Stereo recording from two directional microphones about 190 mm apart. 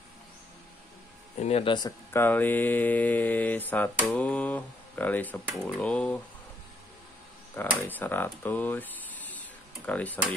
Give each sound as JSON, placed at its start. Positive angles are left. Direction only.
{"t": 1.4, "sound": "speech", "side_deg": 30}
{"t": 2.1, "sound": "speech", "side_deg": 10}
{"t": 7.5, "sound": "speech", "side_deg": 10}